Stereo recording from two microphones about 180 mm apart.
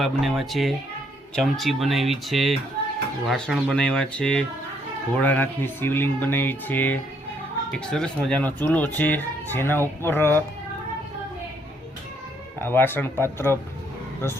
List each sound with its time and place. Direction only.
0.0 s speech: centre (ahead or behind)
12.5 s speech: 10° left (ahead or behind)